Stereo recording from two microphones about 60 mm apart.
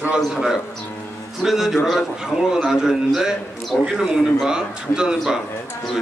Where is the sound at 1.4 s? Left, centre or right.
Centre.